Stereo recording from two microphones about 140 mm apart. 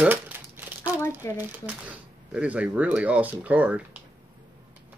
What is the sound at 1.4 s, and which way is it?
Speech, 10° right (ahead or behind).